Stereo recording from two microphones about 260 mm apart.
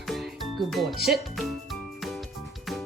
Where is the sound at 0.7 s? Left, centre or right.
Centre.